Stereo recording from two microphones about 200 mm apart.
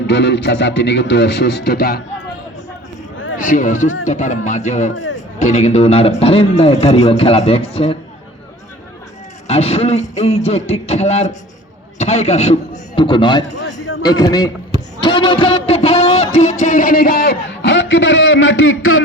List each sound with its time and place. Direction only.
0.1 s speech: 60° left (ahead or behind)
3.3 s a man's voice: 40° left (ahead or behind)
9.5 s a man's voice: 30° left (ahead or behind)
15.0 s a sound: 25° left (ahead or behind); by 19.0 s 90° left